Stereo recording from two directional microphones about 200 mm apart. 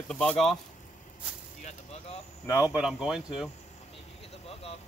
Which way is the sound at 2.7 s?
5° right (ahead or behind).